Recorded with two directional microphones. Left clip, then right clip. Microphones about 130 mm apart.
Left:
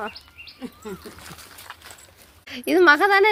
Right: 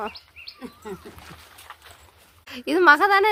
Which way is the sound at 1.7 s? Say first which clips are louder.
Left 2 dB; 90° left.